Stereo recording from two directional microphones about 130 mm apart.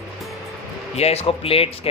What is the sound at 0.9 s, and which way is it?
Speech, 50° left (ahead or behind).